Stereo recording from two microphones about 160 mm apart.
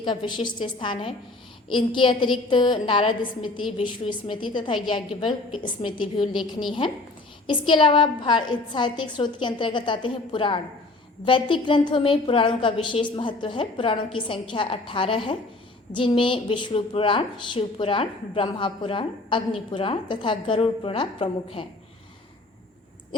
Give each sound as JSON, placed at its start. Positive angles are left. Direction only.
{"t": 0.0, "sound": "a woman's voice", "side_deg": 30}
{"t": 7.7, "sound": "a woman's voice", "side_deg": 30}